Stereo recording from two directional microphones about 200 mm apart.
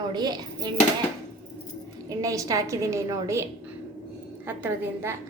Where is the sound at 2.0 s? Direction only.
15° right (ahead or behind).